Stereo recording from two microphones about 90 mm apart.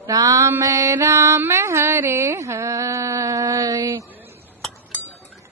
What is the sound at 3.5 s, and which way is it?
Mantra, 45° right (ahead or behind).